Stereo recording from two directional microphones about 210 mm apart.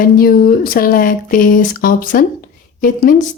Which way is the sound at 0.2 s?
45° left (ahead or behind).